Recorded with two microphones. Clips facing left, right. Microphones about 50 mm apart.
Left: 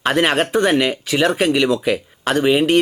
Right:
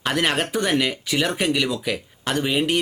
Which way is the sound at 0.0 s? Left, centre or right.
Left.